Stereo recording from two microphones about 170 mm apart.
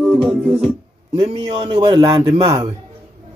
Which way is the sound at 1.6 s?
25° right (ahead or behind).